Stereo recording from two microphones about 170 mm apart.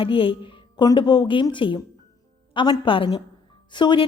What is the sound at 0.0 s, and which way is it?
A woman's voice, 30° left (ahead or behind).